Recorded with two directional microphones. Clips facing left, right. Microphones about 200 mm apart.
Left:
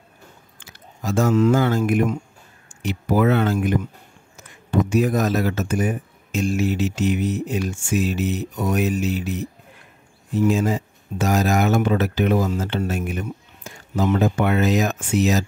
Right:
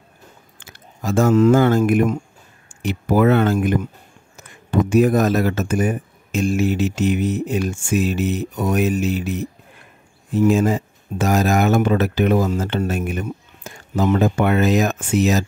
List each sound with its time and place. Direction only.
0.6 s speech: 50° right (ahead or behind)
10.5 s speech: 55° right (ahead or behind)